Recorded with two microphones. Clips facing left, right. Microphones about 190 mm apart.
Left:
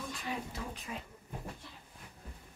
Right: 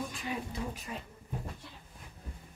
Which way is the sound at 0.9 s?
Centre (ahead or behind).